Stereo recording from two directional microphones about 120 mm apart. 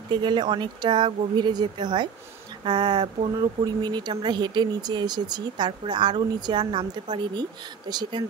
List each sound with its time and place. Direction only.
0.1 s speech: 40° right (ahead or behind)